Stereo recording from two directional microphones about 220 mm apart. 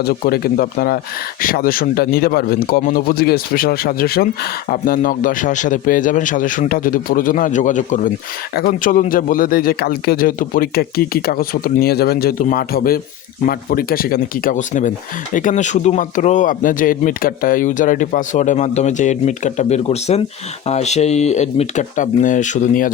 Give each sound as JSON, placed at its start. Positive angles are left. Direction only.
{"t": 0.0, "sound": "a man's voice", "side_deg": 45}